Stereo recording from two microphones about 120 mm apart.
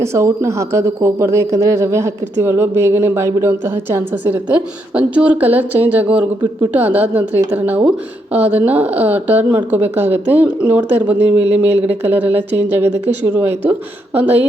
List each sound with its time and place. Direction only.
0.0 s speech: 25° right (ahead or behind)